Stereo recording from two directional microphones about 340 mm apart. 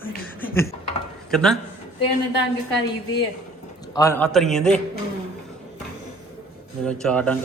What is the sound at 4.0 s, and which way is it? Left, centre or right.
Speech, centre.